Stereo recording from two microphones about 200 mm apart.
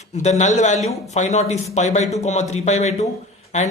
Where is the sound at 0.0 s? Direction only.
35° left (ahead or behind).